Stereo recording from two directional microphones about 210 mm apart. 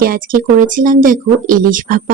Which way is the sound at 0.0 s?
40° right (ahead or behind).